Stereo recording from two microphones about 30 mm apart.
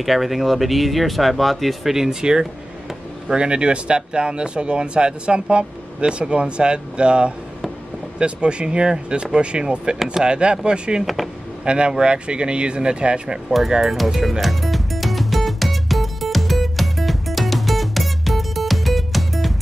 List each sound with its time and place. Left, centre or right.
0.0 s speech: centre
2.0 s speech: right
3.3 s speech: right
13.7 s speech: centre
14.4 s music: centre